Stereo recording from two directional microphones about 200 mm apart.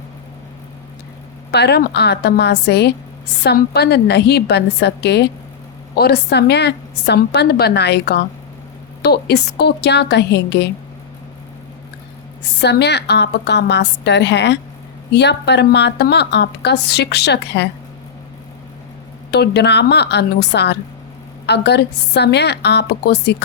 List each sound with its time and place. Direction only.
1.5 s a woman's voice: 55° left (ahead or behind)
12.6 s a woman's voice: 55° left (ahead or behind)
19.3 s a woman's voice: 55° left (ahead or behind)